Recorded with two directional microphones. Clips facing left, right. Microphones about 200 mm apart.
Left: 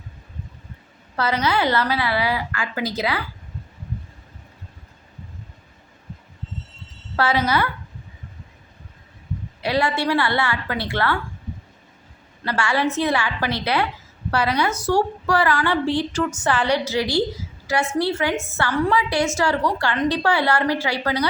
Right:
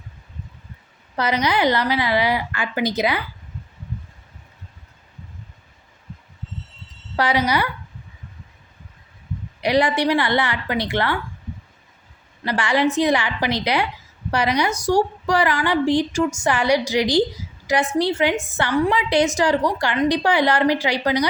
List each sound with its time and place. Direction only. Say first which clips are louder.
1.1 s a woman's voice: right 1 dB; 15° right (ahead or behind)
7.2 s a woman's voice: even; 15° right (ahead or behind)
9.6 s a woman's voice: right 3 dB; 15° right (ahead or behind)
12.4 s a woman's voice: right 2 dB; 15° right (ahead or behind)